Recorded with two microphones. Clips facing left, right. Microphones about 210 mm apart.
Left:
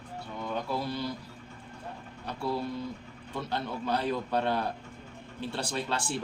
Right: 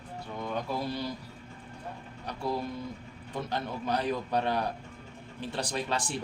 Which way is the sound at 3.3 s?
15° right (ahead or behind).